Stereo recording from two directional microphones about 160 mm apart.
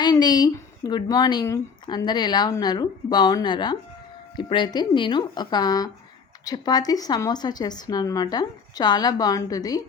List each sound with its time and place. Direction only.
0.0 s speech: 25° left (ahead or behind)